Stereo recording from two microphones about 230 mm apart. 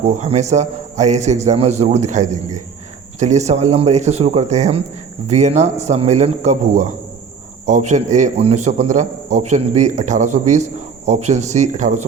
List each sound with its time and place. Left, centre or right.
0.0 s a man's voice: right